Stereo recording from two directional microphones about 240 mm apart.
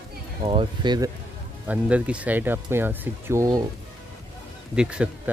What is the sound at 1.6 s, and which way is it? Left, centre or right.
Speech, centre.